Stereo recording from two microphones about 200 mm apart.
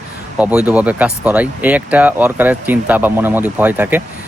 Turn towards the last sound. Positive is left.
turn(degrees=-10)  # may be behind; listen again after turning